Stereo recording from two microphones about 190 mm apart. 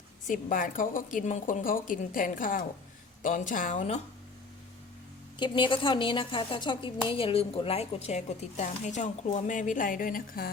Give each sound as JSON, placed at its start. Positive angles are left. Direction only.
{"t": 0.3, "sound": "a woman's voice", "side_deg": 45}
{"t": 5.4, "sound": "a woman's voice", "side_deg": 25}